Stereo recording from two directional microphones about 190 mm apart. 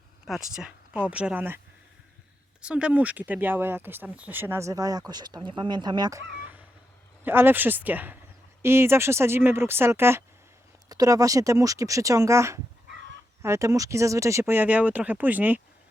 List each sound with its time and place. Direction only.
0.3 s speech: centre (ahead or behind)
2.6 s speech: 5° right (ahead or behind)